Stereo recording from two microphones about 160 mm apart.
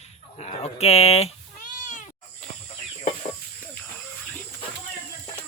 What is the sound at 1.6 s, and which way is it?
Meow, 50° left (ahead or behind).